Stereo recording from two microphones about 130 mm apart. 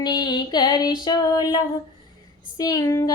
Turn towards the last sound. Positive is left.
turn(degrees=30)  # may be behind; listen again after turning